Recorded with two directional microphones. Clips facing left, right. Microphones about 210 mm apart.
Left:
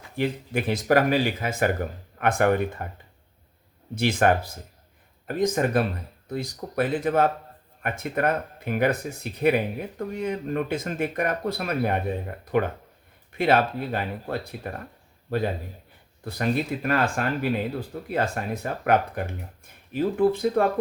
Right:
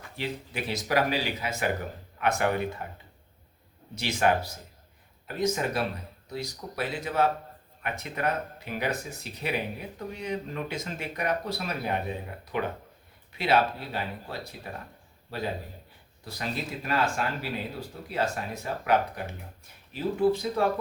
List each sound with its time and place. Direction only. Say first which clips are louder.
0.2 s speech: left 8 dB; 50° left (ahead or behind)
3.9 s speech: left 4 dB; 55° left (ahead or behind)
16.2 s speech: left 8 dB; 55° left (ahead or behind)